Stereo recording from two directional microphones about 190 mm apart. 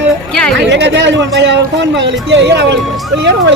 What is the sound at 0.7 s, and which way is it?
Speech, 65° right (ahead or behind).